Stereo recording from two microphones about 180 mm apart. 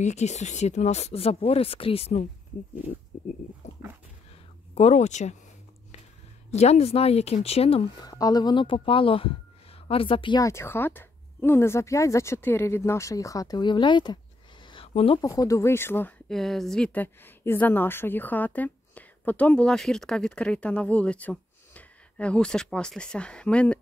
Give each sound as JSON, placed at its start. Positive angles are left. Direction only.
{"t": 0.0, "sound": "speech", "side_deg": 40}
{"t": 3.1, "sound": "pig", "side_deg": 45}
{"t": 3.6, "sound": "dog", "side_deg": 40}
{"t": 4.7, "sound": "speech", "side_deg": 40}
{"t": 6.5, "sound": "speech", "side_deg": 35}
{"t": 8.0, "sound": "speech", "side_deg": 20}
{"t": 15.2, "sound": "speech", "side_deg": 20}